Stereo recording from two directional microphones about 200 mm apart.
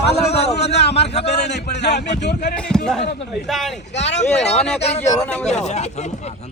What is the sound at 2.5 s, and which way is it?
A man's voice, 5° left (ahead or behind).